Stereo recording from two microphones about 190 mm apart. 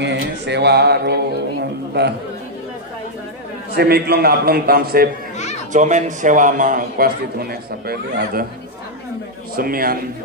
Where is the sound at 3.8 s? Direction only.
55° right (ahead or behind).